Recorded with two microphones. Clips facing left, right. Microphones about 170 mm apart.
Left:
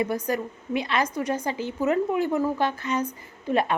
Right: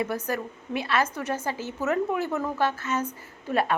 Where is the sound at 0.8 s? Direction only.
15° left (ahead or behind).